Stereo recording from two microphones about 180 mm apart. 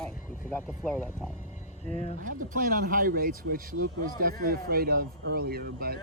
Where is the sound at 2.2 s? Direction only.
50° right (ahead or behind).